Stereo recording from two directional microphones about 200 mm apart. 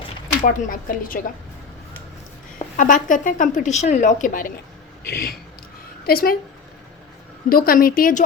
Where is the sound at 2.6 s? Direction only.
40° left (ahead or behind).